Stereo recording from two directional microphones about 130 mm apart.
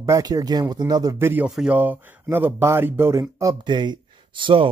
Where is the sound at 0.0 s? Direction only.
25° right (ahead or behind).